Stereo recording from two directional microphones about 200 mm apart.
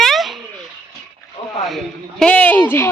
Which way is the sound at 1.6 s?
Centre (ahead or behind).